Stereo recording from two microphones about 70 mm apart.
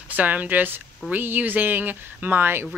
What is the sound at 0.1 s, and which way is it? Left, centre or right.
Speech, right.